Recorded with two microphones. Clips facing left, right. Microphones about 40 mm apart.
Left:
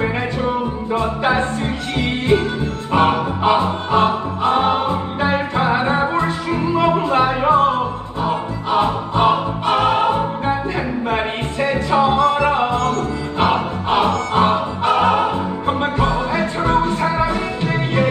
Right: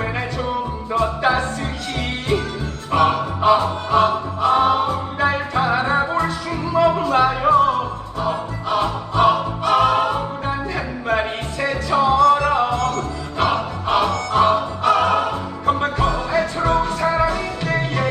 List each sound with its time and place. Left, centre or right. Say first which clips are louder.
0.9 s music: even; left